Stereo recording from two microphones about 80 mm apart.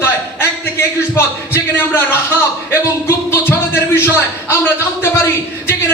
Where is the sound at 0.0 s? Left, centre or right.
Left.